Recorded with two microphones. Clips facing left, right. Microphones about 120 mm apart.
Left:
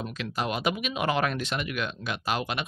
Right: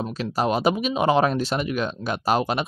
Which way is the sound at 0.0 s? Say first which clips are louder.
Right 7 dB; 35° right (ahead or behind).